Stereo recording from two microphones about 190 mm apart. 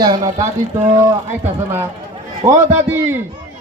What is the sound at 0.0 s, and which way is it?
Speech, 20° right (ahead or behind).